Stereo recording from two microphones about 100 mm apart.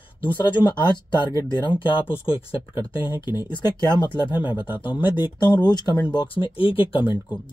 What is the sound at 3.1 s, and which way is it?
Speech, 45° left (ahead or behind).